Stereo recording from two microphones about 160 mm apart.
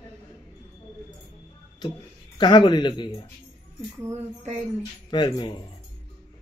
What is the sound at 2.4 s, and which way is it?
Speech, 30° left (ahead or behind).